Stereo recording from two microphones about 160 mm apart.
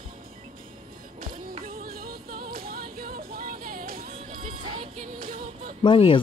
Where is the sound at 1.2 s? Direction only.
60° right (ahead or behind).